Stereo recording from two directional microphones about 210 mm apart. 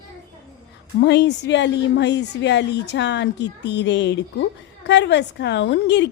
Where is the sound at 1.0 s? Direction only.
55° left (ahead or behind).